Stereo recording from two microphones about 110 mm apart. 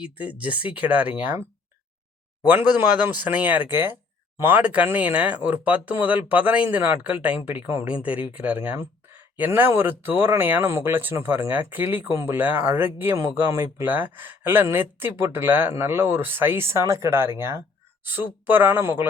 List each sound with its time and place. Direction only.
0.0 s speech: 10° right (ahead or behind)
2.4 s speech: 15° right (ahead or behind)